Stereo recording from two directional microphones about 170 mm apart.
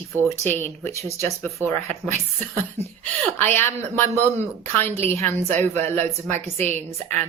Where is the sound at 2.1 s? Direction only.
40° right (ahead or behind).